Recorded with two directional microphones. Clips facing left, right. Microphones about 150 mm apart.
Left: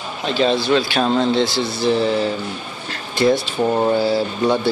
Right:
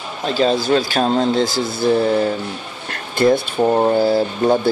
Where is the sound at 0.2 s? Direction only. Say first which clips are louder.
Right 1 dB; 40° right (ahead or behind).